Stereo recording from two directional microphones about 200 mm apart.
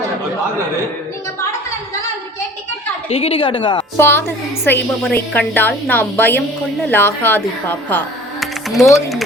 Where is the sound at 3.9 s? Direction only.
10° left (ahead or behind).